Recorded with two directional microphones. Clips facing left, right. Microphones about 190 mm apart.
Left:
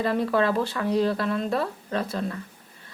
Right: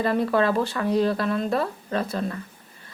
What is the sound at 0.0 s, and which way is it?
Speech, 50° right (ahead or behind).